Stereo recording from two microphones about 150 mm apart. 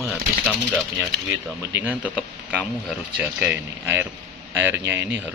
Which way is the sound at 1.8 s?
10° right (ahead or behind).